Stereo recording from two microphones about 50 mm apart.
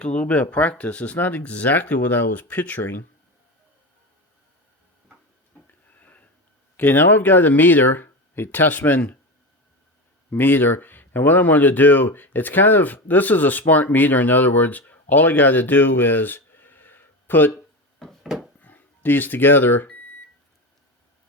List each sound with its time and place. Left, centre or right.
0.0 s speech: left
6.0 s a sound: left
6.7 s speech: left
10.2 s speech: left
18.0 s a sound: centre
18.6 s speech: left